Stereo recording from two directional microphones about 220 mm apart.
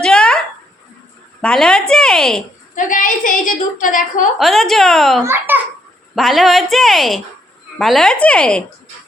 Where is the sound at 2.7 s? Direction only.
35° left (ahead or behind).